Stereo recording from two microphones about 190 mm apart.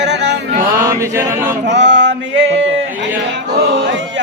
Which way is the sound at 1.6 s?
65° right (ahead or behind).